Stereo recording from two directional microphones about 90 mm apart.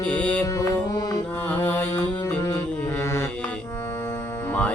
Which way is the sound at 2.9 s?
25° left (ahead or behind).